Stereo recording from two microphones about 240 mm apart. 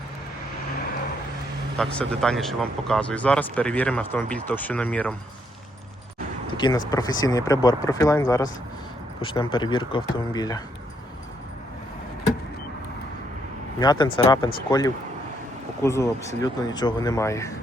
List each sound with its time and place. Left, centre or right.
1.8 s speech: centre
6.5 s speech: centre
13.7 s speech: centre